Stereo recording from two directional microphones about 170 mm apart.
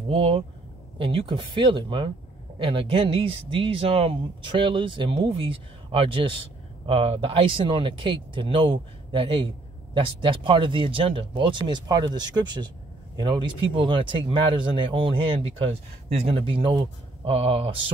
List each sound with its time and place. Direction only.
0.1 s speech: 35° right (ahead or behind)